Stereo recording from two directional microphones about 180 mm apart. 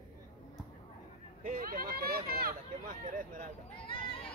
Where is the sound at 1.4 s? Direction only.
50° right (ahead or behind).